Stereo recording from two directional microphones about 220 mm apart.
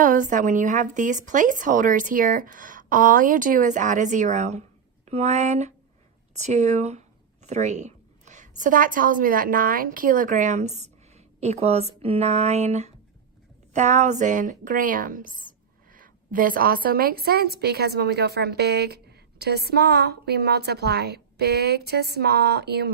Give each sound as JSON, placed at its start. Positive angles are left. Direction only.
{"t": 0.0, "sound": "a woman's voice", "side_deg": -35}